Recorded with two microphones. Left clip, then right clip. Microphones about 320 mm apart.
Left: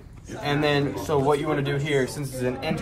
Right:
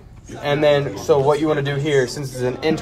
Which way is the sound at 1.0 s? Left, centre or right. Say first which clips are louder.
Right 8 dB; right.